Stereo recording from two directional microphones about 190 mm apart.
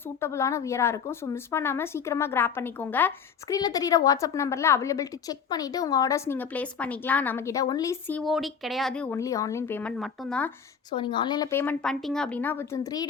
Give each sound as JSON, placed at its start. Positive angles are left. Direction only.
{"t": 0.2, "sound": "a woman's voice", "side_deg": 15}
{"t": 8.2, "sound": "a woman's voice", "side_deg": 0}
{"t": 10.9, "sound": "a woman's voice", "side_deg": 25}
{"t": 11.5, "sound": "a woman's voice", "side_deg": 10}